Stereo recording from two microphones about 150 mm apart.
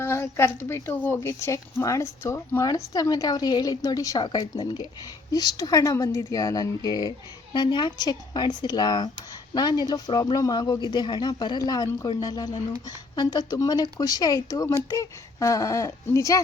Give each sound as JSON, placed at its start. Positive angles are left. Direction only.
{"t": 0.0, "sound": "speech", "side_deg": 15}